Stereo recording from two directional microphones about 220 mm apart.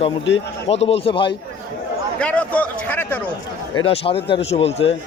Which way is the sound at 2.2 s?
5° left (ahead or behind).